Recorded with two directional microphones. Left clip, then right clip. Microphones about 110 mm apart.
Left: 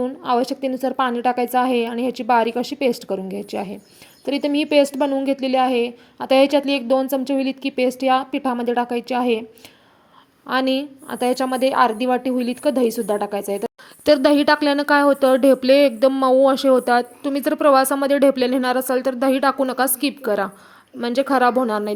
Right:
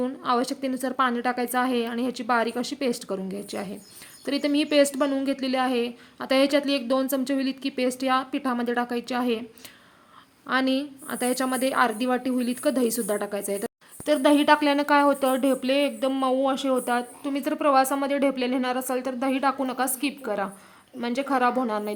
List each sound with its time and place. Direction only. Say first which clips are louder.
0.2 s a woman's voice: left 6 dB; 20° left (ahead or behind)
10.4 s a woman's voice: left 4 dB; 20° left (ahead or behind)
14.0 s a woman's voice: left 6 dB; 55° left (ahead or behind)
14.4 s a woman's voice: left 3 dB; 30° left (ahead or behind)